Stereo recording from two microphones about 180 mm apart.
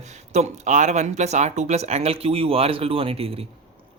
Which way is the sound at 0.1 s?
40° right (ahead or behind).